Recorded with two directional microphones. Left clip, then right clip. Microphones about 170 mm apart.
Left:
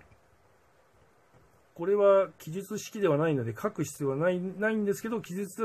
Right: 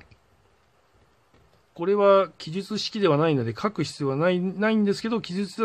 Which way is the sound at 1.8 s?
25° right (ahead or behind).